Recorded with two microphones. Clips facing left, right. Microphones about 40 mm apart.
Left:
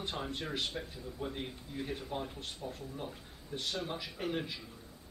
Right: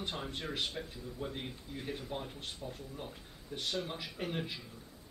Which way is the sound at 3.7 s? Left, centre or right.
Centre.